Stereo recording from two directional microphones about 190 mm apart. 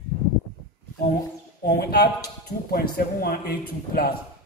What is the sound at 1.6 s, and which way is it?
Speech, 55° left (ahead or behind).